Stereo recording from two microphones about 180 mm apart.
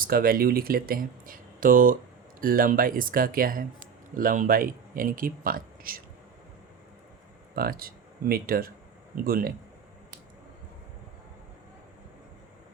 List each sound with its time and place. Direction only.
0.0 s speech: 55° right (ahead or behind)
7.5 s speech: 55° right (ahead or behind)